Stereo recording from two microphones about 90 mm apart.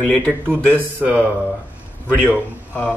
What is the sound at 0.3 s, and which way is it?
Speech, 20° right (ahead or behind).